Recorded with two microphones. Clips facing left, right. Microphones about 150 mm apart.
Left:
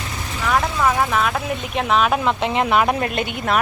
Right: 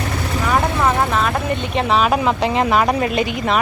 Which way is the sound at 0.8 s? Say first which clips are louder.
Right 1 dB; centre (ahead or behind).